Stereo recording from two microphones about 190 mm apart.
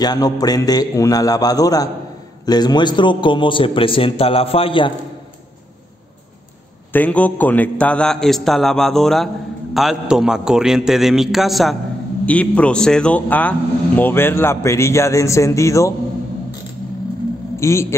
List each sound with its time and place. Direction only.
0.0 s a man's voice: 20° left (ahead or behind)
6.9 s a man's voice: 10° left (ahead or behind)
17.6 s a man's voice: 15° left (ahead or behind)